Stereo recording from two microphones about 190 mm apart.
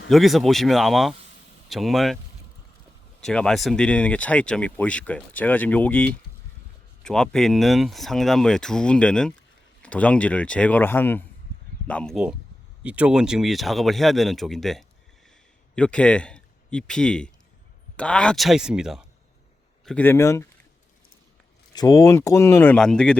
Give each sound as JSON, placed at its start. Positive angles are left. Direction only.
{"t": 0.1, "sound": "speech", "side_deg": 0}
{"t": 3.2, "sound": "a man's voice", "side_deg": 5}
{"t": 21.7, "sound": "speech", "side_deg": 20}